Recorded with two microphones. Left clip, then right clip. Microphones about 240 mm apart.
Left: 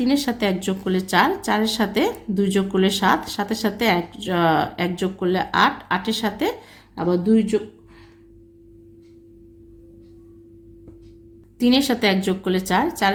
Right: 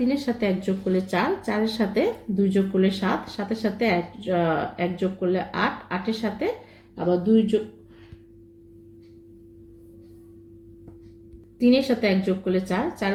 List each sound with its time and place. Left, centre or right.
0.0 s speech: left
11.6 s speech: left